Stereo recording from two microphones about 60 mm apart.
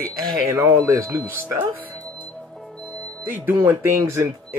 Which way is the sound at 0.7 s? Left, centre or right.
Right.